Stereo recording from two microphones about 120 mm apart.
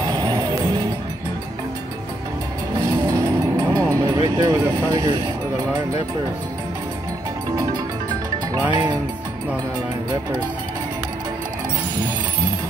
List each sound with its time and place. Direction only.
0.0 s music: 35° right (ahead or behind)
2.9 s vehicle: 30° right (ahead or behind)
3.7 s speech: 30° right (ahead or behind)
8.5 s speech: 30° right (ahead or behind)